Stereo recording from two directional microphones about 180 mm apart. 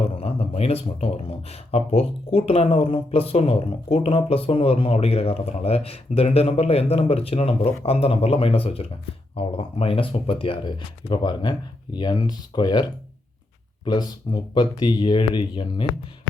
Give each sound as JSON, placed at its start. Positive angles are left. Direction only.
{"t": 0.0, "sound": "speech", "side_deg": 35}